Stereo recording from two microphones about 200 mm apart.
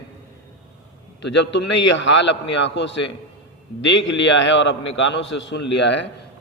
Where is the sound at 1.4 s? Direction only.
65° left (ahead or behind).